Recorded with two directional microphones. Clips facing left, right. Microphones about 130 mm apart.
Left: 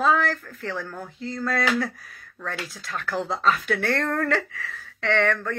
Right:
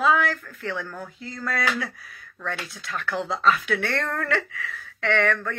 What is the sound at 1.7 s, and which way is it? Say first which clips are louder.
Speech: left 5 dB; 50° left (ahead or behind).